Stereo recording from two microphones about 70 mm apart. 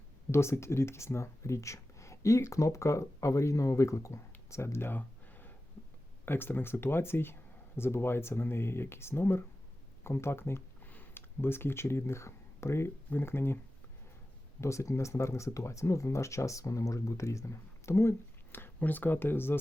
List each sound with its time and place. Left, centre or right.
0.3 s speech: left
4.4 s a sound: left
6.2 s speech: left
14.6 s speech: left
18.5 s speech: left